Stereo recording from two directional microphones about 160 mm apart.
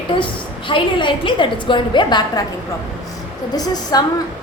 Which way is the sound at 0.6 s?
30° left (ahead or behind).